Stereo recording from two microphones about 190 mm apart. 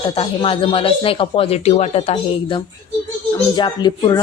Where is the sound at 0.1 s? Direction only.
30° left (ahead or behind).